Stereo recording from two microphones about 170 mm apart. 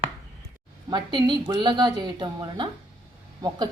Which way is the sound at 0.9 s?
25° right (ahead or behind).